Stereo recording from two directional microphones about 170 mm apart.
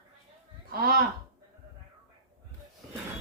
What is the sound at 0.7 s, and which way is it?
Speech, 60° right (ahead or behind).